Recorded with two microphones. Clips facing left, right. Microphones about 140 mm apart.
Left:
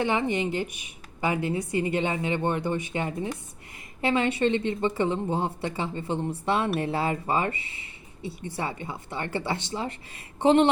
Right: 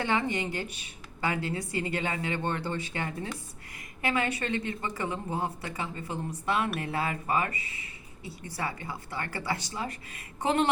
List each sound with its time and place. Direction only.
0.0 s speech: 20° left (ahead or behind)